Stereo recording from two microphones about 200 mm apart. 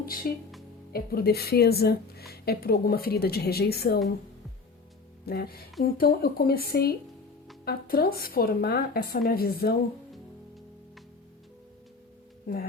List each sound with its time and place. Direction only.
0.2 s speech: 45° left (ahead or behind)
5.2 s music: 50° left (ahead or behind)
5.8 s speech: 50° left (ahead or behind)
12.5 s speech: 45° left (ahead or behind)